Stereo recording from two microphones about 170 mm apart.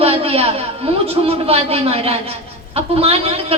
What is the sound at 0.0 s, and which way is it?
A woman's voice, 35° right (ahead or behind).